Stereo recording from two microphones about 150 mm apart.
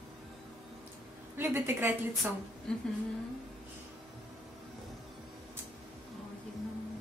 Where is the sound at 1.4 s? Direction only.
15° right (ahead or behind).